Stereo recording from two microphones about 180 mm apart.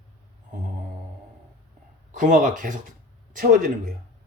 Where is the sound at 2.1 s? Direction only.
45° right (ahead or behind).